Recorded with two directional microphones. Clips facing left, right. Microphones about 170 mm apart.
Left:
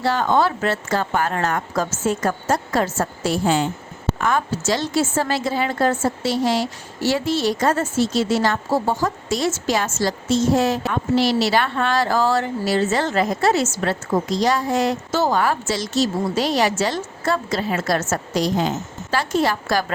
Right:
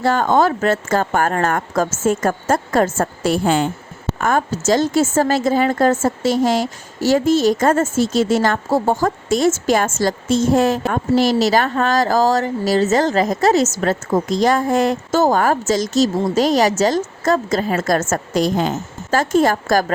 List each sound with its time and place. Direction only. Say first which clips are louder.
0.0 s a woman's voice: right 3 dB; 50° right (ahead or behind)